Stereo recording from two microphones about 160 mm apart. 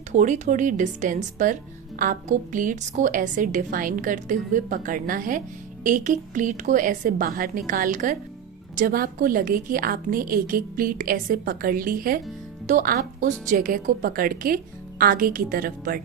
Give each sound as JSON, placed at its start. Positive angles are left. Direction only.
{"t": 0.1, "sound": "a woman's voice", "side_deg": -50}